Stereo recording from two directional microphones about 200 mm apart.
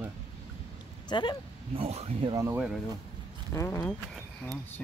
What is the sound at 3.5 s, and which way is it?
Speech, 15° left (ahead or behind).